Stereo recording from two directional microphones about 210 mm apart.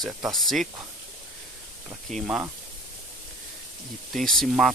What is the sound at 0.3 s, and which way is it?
Speech, centre (ahead or behind).